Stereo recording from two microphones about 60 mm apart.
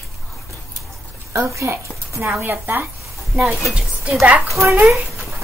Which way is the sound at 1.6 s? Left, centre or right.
Right.